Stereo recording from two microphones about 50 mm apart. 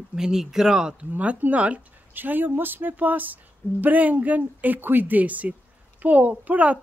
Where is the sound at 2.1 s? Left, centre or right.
Right.